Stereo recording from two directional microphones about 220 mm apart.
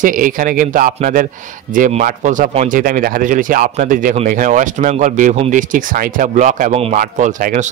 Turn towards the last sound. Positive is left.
turn(degrees=-35)  # may be behind; listen again after turning